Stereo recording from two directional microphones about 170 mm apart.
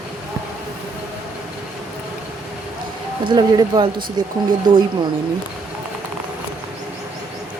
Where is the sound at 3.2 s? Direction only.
25° right (ahead or behind).